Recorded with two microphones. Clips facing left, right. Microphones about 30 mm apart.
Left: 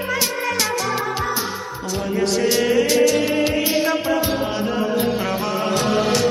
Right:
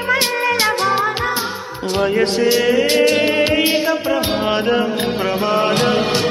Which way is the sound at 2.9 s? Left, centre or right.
Right.